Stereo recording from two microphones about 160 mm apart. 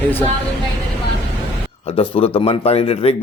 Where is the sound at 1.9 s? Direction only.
35° left (ahead or behind).